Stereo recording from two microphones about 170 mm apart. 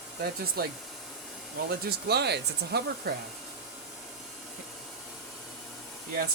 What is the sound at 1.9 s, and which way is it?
Speech, 70° right (ahead or behind).